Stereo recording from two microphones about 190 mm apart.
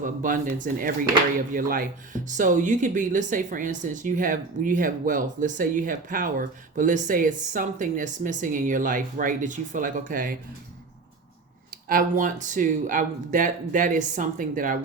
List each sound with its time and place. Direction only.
0.0 s speech: 45° right (ahead or behind)
11.7 s speech: 50° right (ahead or behind)